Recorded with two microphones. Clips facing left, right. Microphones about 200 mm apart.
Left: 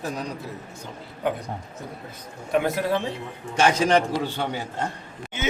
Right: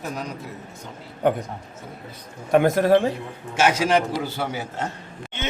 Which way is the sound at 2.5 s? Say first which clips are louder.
Right 6 dB; 50° right (ahead or behind).